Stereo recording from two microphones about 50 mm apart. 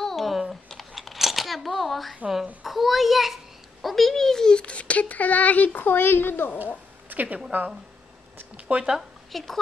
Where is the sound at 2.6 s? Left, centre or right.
Centre.